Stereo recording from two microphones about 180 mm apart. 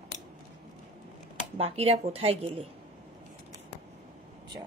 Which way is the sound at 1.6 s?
35° right (ahead or behind).